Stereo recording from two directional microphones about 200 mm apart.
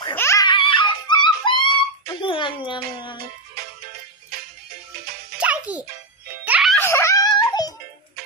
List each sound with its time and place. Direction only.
0.1 s giggle: 10° left (ahead or behind)
2.2 s music: 25° left (ahead or behind)
5.4 s music: 5° right (ahead or behind)
6.7 s a sound: 10° left (ahead or behind)